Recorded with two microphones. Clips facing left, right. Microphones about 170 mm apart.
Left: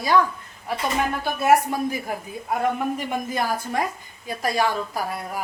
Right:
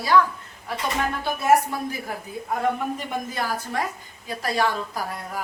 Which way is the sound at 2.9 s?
15° left (ahead or behind).